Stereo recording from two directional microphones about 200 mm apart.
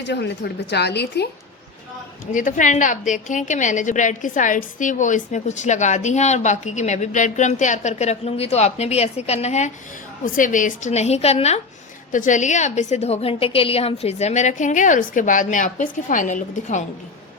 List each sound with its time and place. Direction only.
0.0 s a woman's voice: 60° left (ahead or behind)
2.3 s a woman's voice: 40° left (ahead or behind)